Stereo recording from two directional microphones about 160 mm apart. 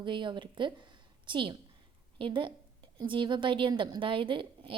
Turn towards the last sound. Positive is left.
turn(degrees=-30)  # may be behind; listen again after turning